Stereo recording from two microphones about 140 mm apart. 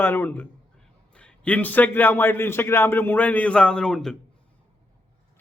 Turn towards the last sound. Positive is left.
turn(degrees=5)  # may be behind; listen again after turning